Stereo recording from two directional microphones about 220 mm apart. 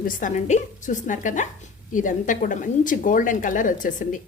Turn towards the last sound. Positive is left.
turn(degrees=35)  # may be behind; listen again after turning